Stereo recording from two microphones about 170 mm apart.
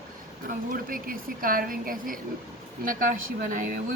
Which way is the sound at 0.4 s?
55° right (ahead or behind).